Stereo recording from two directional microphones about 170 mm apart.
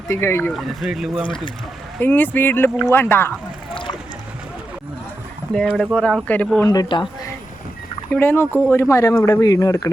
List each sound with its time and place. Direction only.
0.1 s speech: 15° left (ahead or behind)
0.5 s speech: centre (ahead or behind)
2.0 s speech: 10° left (ahead or behind)
5.7 s speech: centre (ahead or behind)
6.7 s speech: 25° left (ahead or behind)
8.1 s speech: 10° left (ahead or behind)